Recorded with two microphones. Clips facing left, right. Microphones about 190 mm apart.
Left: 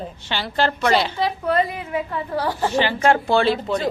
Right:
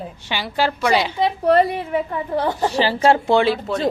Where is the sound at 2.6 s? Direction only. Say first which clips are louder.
Right 1 dB; 35° right (ahead or behind).